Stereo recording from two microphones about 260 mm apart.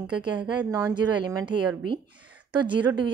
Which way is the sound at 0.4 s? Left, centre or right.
Centre.